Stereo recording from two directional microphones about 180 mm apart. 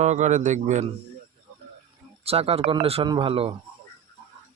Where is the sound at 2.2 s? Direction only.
35° right (ahead or behind).